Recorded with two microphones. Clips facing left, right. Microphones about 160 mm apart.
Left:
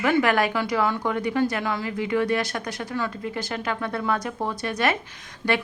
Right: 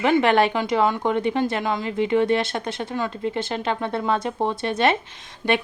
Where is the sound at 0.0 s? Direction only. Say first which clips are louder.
Right 3 dB; 25° right (ahead or behind).